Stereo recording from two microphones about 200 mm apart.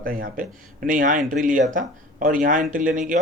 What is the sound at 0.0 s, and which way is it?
Speech, 45° right (ahead or behind).